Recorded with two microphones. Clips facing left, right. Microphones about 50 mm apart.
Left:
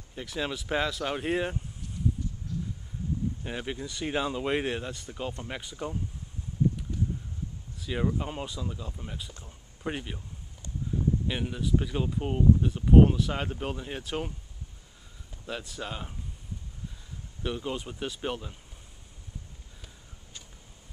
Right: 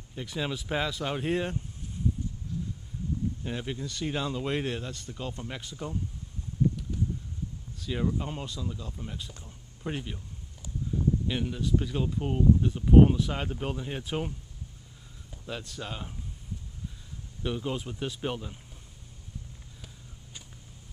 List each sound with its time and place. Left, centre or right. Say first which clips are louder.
0.1 s speech: even; centre
3.4 s speech: even; centre
7.8 s speech: left 1 dB; centre
11.2 s speech: right 1 dB; centre
15.4 s speech: left 1 dB; centre
17.4 s speech: right 1 dB; centre